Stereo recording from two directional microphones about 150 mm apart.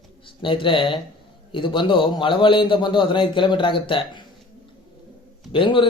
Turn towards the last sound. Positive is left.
turn(degrees=35)  # may be behind; listen again after turning